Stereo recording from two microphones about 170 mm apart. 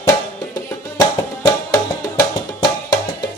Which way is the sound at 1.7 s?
20° left (ahead or behind).